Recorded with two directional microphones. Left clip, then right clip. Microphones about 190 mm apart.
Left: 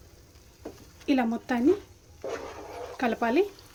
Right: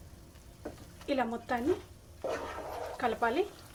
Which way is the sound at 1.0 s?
55° left (ahead or behind).